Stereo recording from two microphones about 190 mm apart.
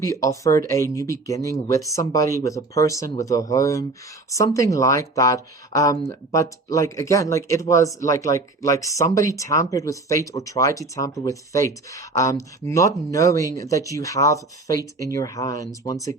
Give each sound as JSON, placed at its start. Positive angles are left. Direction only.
{"t": 0.0, "sound": "speech", "side_deg": 15}